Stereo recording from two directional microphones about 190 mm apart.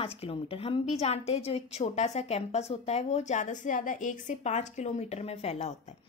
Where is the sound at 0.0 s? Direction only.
30° left (ahead or behind).